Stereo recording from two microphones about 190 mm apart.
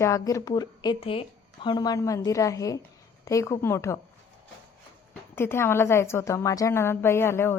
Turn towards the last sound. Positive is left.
turn(degrees=15)  # may be behind; listen again after turning